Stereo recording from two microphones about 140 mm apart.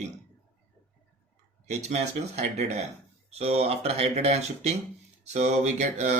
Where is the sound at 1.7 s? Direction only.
55° right (ahead or behind).